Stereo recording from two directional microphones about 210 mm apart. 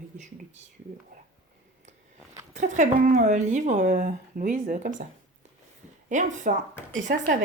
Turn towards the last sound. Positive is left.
turn(degrees=-50)  # may be behind; listen again after turning